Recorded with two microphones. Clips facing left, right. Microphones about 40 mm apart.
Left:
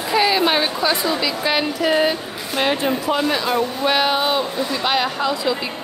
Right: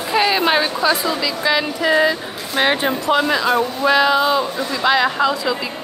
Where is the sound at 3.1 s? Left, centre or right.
Right.